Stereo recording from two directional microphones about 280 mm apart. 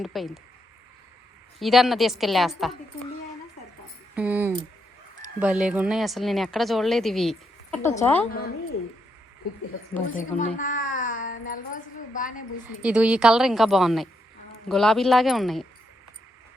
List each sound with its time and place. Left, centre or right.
0.0 s a woman's voice: centre
1.5 s a woman's voice: centre
4.1 s a sound: centre
5.4 s a woman's voice: centre
8.2 s a woman's voice: left
9.9 s a child's voice: left
12.8 s a woman's voice: centre